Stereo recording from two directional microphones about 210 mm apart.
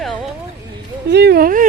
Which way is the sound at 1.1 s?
50° right (ahead or behind).